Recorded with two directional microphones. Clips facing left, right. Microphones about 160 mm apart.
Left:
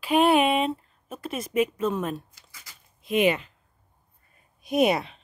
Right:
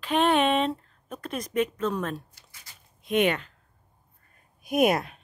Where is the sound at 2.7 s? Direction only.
90° left.